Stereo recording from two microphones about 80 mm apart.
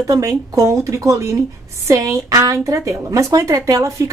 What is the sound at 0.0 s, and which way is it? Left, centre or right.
Speech, right.